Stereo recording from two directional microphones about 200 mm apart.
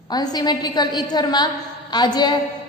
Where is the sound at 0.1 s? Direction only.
20° left (ahead or behind).